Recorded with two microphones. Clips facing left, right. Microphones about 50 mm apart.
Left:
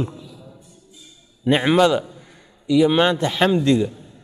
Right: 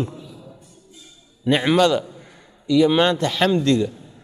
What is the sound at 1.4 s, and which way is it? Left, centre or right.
A man's voice, centre.